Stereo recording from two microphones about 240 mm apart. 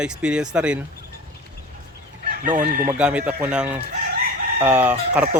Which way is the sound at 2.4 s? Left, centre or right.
Right.